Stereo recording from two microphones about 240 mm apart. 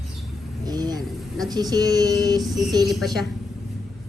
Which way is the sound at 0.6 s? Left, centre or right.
Centre.